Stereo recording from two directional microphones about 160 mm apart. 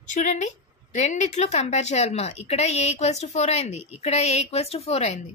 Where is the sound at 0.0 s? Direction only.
50° left (ahead or behind).